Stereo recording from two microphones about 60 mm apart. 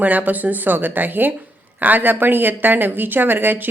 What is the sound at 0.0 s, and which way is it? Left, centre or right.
Speech, right.